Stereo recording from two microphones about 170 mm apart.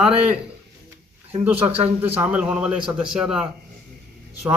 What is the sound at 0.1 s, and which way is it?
Speech, 5° right (ahead or behind).